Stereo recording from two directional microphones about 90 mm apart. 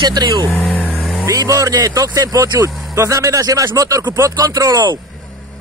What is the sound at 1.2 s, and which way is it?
Speech, 40° right (ahead or behind).